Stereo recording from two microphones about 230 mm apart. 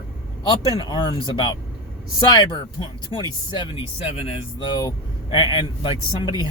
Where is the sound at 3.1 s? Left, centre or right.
Left.